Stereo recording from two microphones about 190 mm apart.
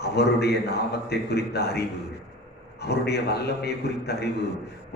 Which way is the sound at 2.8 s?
60° left (ahead or behind).